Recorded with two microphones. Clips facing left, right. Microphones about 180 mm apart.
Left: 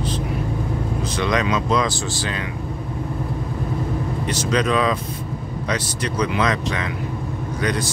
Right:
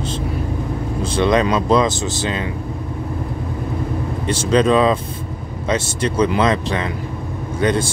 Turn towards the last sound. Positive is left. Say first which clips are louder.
# right 5 dB
turn(degrees=-25)  # may be behind; listen again after turning